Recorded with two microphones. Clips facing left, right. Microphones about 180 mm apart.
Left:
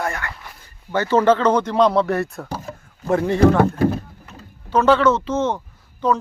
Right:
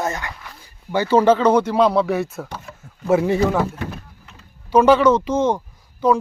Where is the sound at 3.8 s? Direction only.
35° left (ahead or behind).